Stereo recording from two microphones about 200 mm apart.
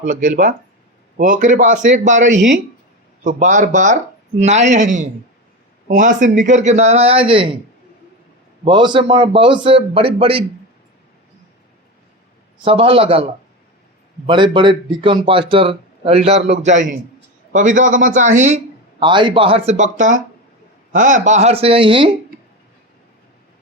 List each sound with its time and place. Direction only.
0.0 s a man's voice: 40° right (ahead or behind)
8.6 s speech: 25° right (ahead or behind)
12.6 s speech: 25° right (ahead or behind)
14.3 s a man's voice: 25° right (ahead or behind)